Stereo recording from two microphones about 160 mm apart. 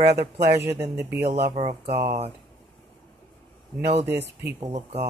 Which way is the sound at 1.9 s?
80° right.